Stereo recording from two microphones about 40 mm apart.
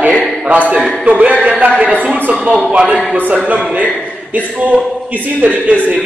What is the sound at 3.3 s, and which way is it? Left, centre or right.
A man's voice, right.